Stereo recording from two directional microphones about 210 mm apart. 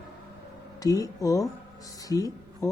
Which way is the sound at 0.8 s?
15° left (ahead or behind).